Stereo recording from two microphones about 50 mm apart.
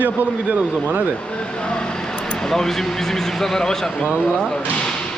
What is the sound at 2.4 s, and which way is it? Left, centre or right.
Speech, centre.